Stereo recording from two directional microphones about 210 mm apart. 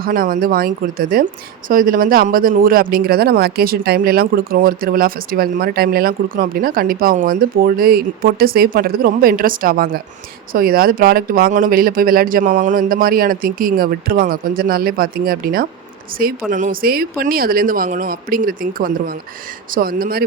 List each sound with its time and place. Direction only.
0.0 s speech: 45° right (ahead or behind)